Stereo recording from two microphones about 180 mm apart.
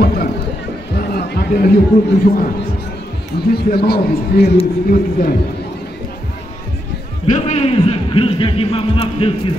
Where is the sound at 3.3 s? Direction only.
60° left (ahead or behind).